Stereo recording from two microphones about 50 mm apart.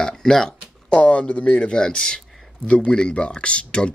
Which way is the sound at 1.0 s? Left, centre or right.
Left.